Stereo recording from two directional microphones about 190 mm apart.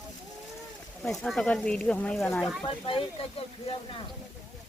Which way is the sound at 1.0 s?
Centre (ahead or behind).